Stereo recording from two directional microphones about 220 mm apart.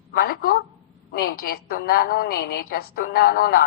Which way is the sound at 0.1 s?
45° left (ahead or behind).